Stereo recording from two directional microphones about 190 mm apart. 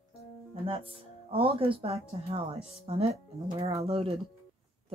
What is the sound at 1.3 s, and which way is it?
Speech, 30° right (ahead or behind).